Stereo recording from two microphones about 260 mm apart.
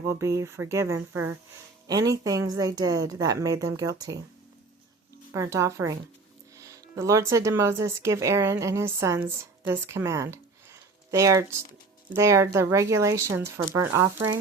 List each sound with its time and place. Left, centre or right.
0.1 s speech: centre
5.3 s speech: centre